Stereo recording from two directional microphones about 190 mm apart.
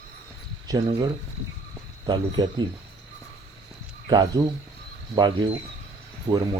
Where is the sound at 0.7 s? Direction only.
20° right (ahead or behind).